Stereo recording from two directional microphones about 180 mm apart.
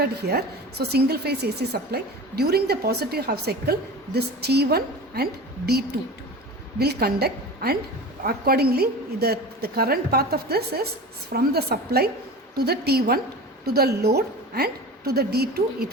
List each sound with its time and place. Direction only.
0.0 s a woman's voice: 60° right (ahead or behind)